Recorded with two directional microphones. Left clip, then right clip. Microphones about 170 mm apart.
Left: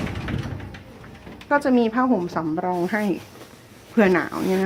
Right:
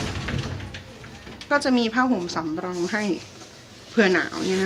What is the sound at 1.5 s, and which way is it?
Speech, 25° left (ahead or behind).